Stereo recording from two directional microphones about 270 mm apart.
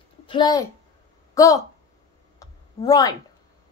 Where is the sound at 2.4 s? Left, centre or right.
Centre.